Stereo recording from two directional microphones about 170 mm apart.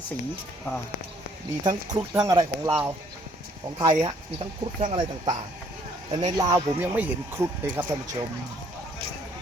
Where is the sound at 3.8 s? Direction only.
25° right (ahead or behind).